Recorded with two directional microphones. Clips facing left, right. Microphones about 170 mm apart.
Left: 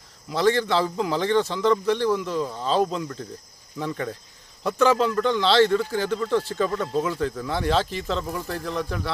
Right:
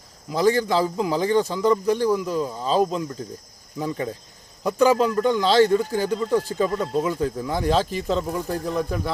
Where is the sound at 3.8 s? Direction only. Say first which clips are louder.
Right 2 dB; 20° right (ahead or behind).